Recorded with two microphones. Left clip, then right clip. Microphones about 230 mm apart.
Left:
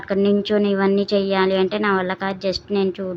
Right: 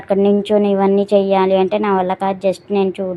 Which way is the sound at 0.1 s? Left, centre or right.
Centre.